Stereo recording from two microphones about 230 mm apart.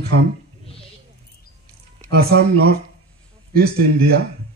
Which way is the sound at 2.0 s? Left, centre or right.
Right.